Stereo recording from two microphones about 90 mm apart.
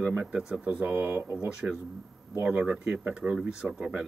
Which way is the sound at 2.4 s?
10° right (ahead or behind).